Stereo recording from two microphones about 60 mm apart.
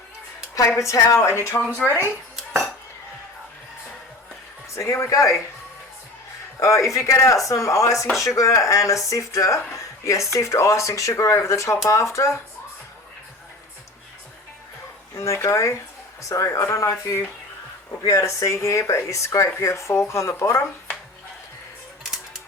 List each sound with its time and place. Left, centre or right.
0.8 s speech: left
1.3 s speech: left
1.8 s speech: centre
2.3 s dishes: centre
4.7 s speech: left
6.6 s speech: left
15.2 s speech: left